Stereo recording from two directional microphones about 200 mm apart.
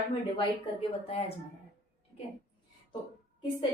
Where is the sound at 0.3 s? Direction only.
30° left (ahead or behind).